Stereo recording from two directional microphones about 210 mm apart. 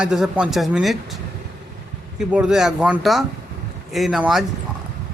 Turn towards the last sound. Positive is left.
turn(degrees=0)  # may be behind; listen again after turning